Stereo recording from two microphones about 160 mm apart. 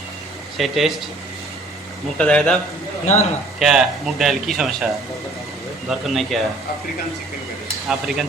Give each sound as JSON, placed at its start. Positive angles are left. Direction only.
{"t": 0.5, "sound": "speech", "side_deg": 0}
{"t": 2.1, "sound": "a man's voice", "side_deg": 5}
{"t": 3.6, "sound": "speech", "side_deg": 0}
{"t": 5.9, "sound": "speech", "side_deg": 0}
{"t": 7.9, "sound": "speech", "side_deg": -5}